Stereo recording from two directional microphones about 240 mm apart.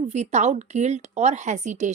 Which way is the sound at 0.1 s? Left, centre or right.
Right.